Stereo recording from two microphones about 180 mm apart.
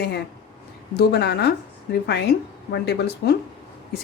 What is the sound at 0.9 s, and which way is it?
Speech, 65° left (ahead or behind).